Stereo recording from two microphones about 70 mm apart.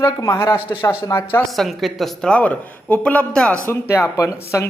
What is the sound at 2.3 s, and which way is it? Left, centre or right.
Speech, left.